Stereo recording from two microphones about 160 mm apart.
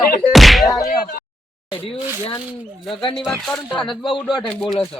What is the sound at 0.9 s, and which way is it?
Speech, 70° left (ahead or behind).